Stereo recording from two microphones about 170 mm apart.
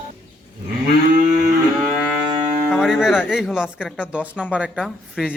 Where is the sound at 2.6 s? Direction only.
Centre (ahead or behind).